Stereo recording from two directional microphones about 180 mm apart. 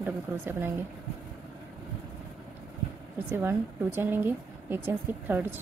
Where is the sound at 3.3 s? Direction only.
10° right (ahead or behind).